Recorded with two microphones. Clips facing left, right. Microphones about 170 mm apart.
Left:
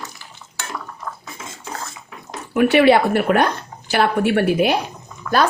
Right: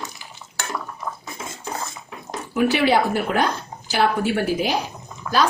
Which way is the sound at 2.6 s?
60° left (ahead or behind).